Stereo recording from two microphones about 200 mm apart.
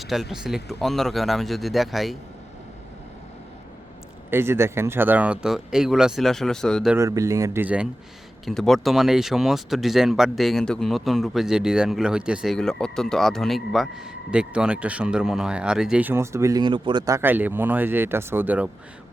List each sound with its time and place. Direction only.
0.0 s speech: centre (ahead or behind)
4.3 s speech: 10° right (ahead or behind)
6.9 s speech: 15° right (ahead or behind)
17.2 s speech: 10° right (ahead or behind)